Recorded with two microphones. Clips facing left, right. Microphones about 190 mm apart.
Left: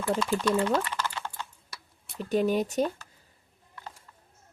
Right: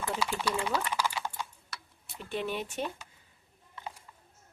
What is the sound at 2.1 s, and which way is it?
Speech, 40° left (ahead or behind).